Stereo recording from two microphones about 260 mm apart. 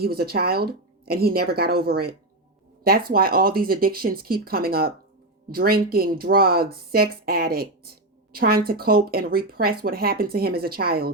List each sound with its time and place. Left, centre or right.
0.0 s speech: right